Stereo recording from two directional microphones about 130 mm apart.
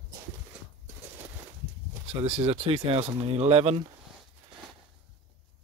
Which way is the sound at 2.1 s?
55° right (ahead or behind).